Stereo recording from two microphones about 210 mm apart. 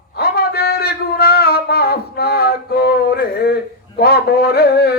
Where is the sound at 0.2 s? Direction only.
45° left (ahead or behind).